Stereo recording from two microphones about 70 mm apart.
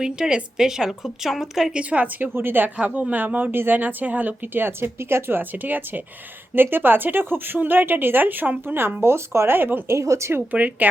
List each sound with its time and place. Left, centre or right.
0.0 s a woman's voice: centre
1.7 s speech: centre
2.7 s speech: centre; by 10.4 s right
10.5 s speech: right